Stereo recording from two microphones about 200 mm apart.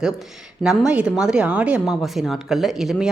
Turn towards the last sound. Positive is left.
turn(degrees=0)  # may be behind; listen again after turning